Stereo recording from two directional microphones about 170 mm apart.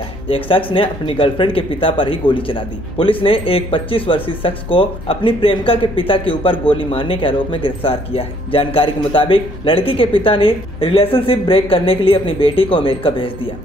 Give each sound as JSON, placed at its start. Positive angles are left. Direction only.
{"t": 0.3, "sound": "speech", "side_deg": 30}